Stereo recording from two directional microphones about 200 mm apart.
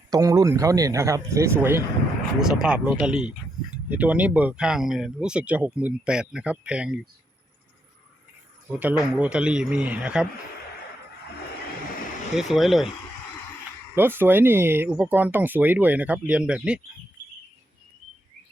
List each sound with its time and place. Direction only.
0.1 s speech: 15° right (ahead or behind)
8.8 s speech: 5° right (ahead or behind)
12.4 s speech: centre (ahead or behind)
13.9 s speech: 10° right (ahead or behind)